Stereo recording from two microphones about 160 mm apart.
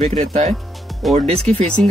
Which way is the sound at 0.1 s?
45° right (ahead or behind).